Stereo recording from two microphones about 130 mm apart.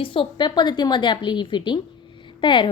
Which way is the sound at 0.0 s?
40° left (ahead or behind).